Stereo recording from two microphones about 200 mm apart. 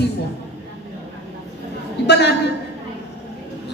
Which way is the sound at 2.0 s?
55° left (ahead or behind).